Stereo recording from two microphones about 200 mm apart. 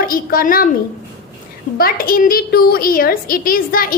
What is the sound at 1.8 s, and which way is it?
A woman's voice, 45° left (ahead or behind).